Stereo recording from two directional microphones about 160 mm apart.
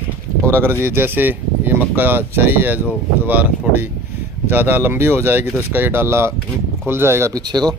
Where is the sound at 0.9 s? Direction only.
15° right (ahead or behind).